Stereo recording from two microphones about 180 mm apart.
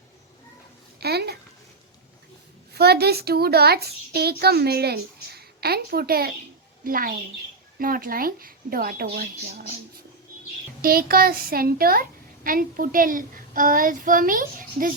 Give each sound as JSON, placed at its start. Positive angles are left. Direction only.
{"t": 0.9, "sound": "a sound", "side_deg": -60}
{"t": 2.7, "sound": "a child's voice", "side_deg": -65}
{"t": 10.8, "sound": "a child's voice", "side_deg": -55}